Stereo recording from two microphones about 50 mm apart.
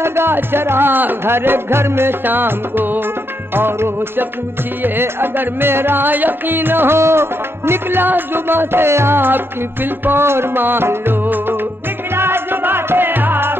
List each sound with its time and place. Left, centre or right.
0.0 s music: right
7.0 s music: right